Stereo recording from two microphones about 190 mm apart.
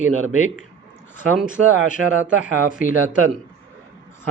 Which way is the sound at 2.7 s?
45° left (ahead or behind).